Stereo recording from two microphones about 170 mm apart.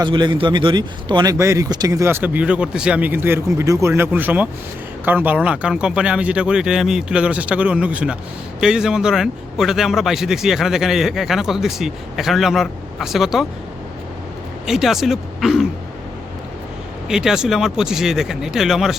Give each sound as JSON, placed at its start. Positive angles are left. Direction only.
{"t": 0.0, "sound": "a man's voice", "side_deg": -25}
{"t": 14.7, "sound": "a man's voice", "side_deg": 0}
{"t": 17.1, "sound": "a man's voice", "side_deg": -5}